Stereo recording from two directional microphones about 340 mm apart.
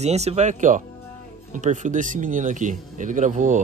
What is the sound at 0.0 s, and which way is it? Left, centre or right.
Speech, centre.